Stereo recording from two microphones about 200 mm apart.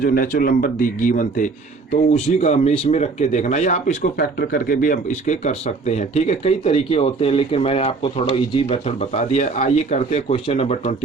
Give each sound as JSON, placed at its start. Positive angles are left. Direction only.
{"t": 0.0, "sound": "speech", "side_deg": 45}